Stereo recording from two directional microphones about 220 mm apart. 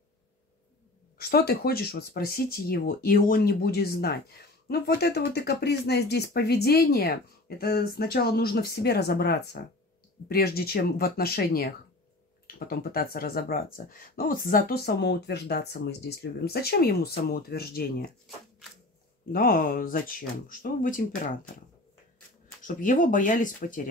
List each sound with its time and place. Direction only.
1.1 s speech: 45° left (ahead or behind)
19.3 s speech: 40° left (ahead or behind)
22.6 s speech: 35° left (ahead or behind)